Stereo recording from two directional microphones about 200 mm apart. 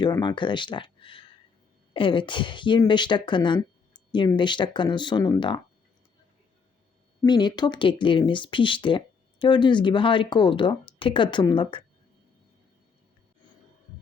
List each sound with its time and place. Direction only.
0.0 s speech: 20° left (ahead or behind)
7.2 s speech: 20° left (ahead or behind)